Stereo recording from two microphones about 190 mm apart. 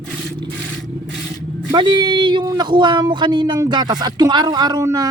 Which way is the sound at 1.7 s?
25° right (ahead or behind).